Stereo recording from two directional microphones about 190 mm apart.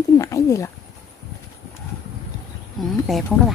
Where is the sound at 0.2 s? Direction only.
15° left (ahead or behind).